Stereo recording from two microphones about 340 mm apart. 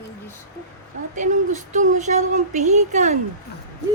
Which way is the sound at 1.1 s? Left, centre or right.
Right.